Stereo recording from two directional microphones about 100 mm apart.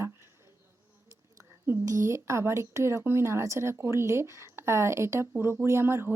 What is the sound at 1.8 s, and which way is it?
Speech, 30° right (ahead or behind).